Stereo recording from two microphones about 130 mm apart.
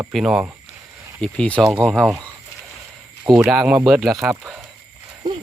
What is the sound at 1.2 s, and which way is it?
Speech, 10° left (ahead or behind).